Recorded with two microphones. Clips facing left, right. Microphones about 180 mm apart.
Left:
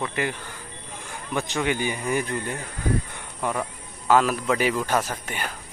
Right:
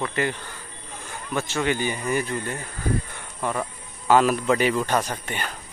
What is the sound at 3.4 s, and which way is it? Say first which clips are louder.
Speech: even; 5° left (ahead or behind).